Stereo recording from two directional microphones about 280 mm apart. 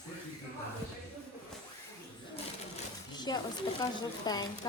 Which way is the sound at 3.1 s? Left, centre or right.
Centre.